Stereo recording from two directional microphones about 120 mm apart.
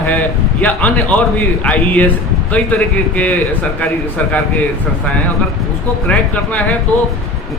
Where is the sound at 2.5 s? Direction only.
10° left (ahead or behind).